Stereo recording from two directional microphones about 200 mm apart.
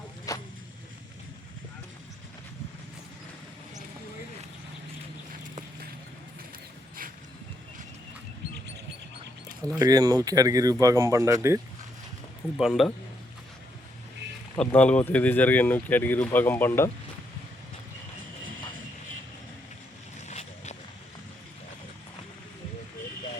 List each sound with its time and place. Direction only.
0.3 s vehicle: 15° left (ahead or behind)
9.7 s speech: 20° right (ahead or behind)
12.5 s a man's voice: centre (ahead or behind)
14.6 s speech: 5° left (ahead or behind)
20.2 s vehicle: 35° left (ahead or behind)